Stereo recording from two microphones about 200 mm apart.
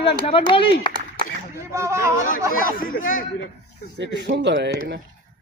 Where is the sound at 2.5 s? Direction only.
45° left (ahead or behind).